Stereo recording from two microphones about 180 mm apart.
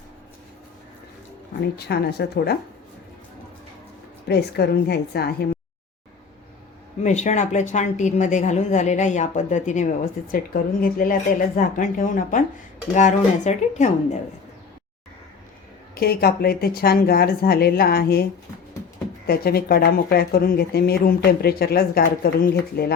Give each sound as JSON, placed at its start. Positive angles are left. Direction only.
{"t": 1.9, "sound": "speech", "side_deg": 65}
{"t": 4.3, "sound": "speech", "side_deg": 65}
{"t": 7.0, "sound": "a woman's voice", "side_deg": 40}
{"t": 16.0, "sound": "speech", "side_deg": 60}
{"t": 19.3, "sound": "speech", "side_deg": 60}